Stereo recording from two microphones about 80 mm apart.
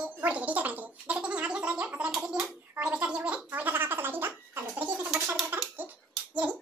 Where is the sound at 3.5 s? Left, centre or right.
Right.